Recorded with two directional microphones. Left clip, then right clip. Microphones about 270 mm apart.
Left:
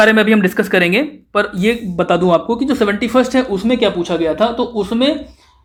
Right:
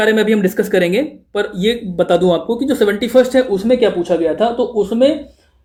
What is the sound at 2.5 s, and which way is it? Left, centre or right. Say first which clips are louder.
Speech: right 1 dB; centre.